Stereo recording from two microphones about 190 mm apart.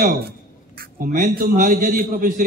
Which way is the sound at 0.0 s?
50° right (ahead or behind).